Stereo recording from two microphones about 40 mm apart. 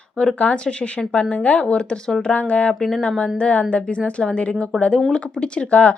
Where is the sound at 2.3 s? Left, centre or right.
Left.